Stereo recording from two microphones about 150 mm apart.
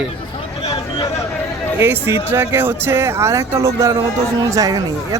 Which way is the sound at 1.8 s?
15° right (ahead or behind).